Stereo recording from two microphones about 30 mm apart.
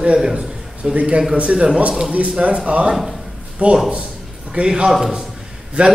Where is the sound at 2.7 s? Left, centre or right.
Right.